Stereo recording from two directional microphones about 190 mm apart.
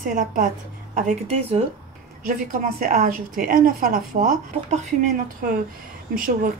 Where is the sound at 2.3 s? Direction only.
45° right (ahead or behind).